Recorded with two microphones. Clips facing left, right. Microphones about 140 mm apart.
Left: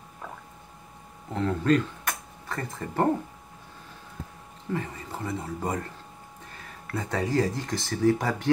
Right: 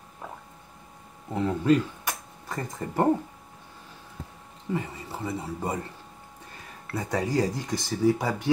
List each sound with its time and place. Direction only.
1.3 s speech: 15° right (ahead or behind)
4.7 s speech: 10° right (ahead or behind)
6.9 s speech: 15° right (ahead or behind)
7.5 s speech: centre (ahead or behind)